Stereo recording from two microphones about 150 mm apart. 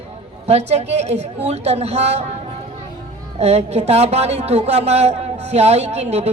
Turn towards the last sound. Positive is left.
turn(degrees=-45)  # may be behind; listen again after turning